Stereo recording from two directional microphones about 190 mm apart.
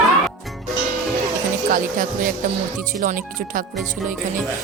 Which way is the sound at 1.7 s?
45° right (ahead or behind).